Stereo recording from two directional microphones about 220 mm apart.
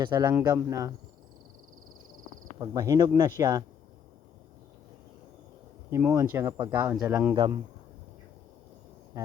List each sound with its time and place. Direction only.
0.0 s speech: 20° right (ahead or behind)
2.6 s speech: 15° right (ahead or behind)
5.9 s speech: 15° right (ahead or behind)
7.3 s speech: 20° right (ahead or behind)